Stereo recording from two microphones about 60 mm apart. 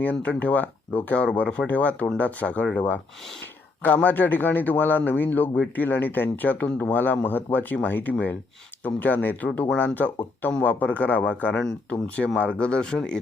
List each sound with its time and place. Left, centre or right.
0.0 s speech: left